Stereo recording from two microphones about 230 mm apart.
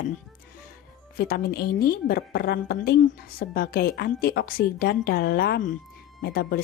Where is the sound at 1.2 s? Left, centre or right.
Left.